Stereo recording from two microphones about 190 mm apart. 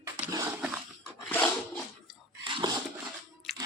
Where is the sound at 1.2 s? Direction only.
5° left (ahead or behind).